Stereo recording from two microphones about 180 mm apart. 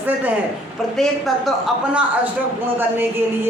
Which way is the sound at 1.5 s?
5° right (ahead or behind).